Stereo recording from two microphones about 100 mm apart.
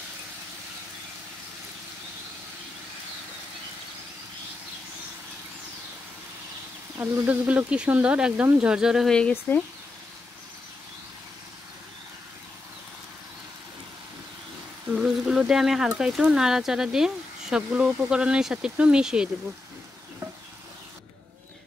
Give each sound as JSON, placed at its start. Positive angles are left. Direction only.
{"t": 7.2, "sound": "speech", "side_deg": -15}
{"t": 9.5, "sound": "speech", "side_deg": 15}
{"t": 14.9, "sound": "a sound", "side_deg": -5}
{"t": 16.0, "sound": "speech", "side_deg": -5}